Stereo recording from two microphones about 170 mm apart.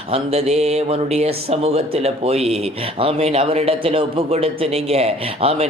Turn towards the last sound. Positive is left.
turn(degrees=-35)  # may be behind; listen again after turning